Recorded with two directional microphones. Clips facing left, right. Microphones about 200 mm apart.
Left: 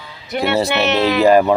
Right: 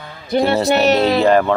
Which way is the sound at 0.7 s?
35° right (ahead or behind).